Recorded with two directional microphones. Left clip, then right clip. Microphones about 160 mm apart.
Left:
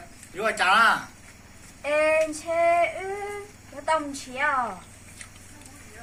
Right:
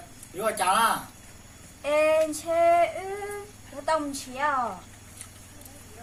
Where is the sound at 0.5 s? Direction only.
10° right (ahead or behind).